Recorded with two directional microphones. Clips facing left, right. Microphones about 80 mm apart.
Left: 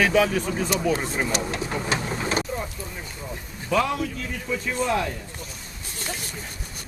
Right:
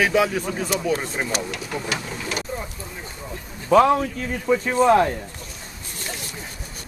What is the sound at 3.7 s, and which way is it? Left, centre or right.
Speech, right.